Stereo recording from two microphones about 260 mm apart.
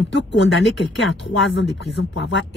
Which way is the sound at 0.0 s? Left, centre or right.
Left.